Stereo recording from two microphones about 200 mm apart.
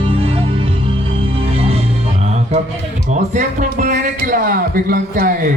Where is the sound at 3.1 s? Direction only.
40° right (ahead or behind).